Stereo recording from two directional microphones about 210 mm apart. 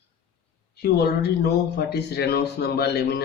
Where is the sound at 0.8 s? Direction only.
50° left (ahead or behind).